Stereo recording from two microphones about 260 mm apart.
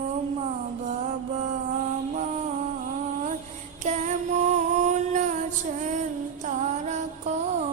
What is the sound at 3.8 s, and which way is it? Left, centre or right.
Female singing, right.